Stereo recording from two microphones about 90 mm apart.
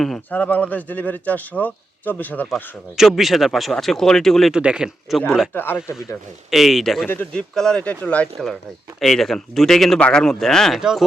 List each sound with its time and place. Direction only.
0.3 s speech: 20° left (ahead or behind)
3.0 s speech: centre (ahead or behind)
4.5 s a man's voice: 10° right (ahead or behind)
7.1 s speech: 20° left (ahead or behind)
7.5 s speech: 5° left (ahead or behind)
9.0 s speech: centre (ahead or behind)
10.8 s speech: 5° right (ahead or behind)